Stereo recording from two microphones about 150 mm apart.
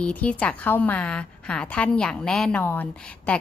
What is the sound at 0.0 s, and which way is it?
A woman's voice, 10° left (ahead or behind).